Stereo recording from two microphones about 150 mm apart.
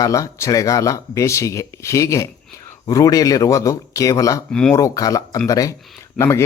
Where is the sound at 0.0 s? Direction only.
20° left (ahead or behind).